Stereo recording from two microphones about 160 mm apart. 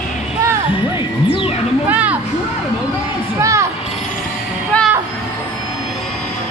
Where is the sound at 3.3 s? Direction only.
20° right (ahead or behind).